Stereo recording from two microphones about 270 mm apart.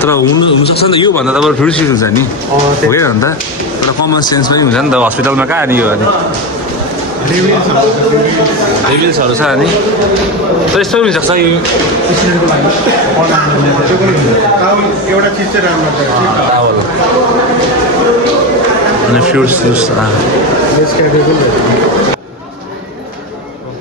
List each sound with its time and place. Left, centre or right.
0.8 s a man's voice: centre
1.3 s a man's voice: centre
4.7 s speech: centre
10.8 s a man's voice: centre
19.3 s a man's voice: centre